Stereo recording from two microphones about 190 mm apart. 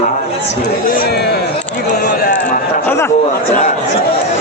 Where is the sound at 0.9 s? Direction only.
55° left (ahead or behind).